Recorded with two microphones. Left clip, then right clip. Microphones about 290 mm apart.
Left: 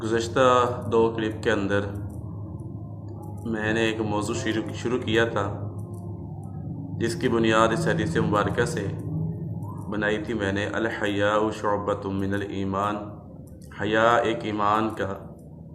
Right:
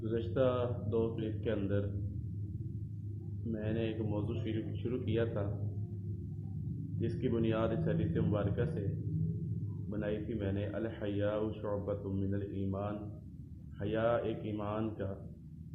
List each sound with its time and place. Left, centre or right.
0.1 s speech: left
3.5 s speech: centre
7.3 s speech: left
9.9 s speech: left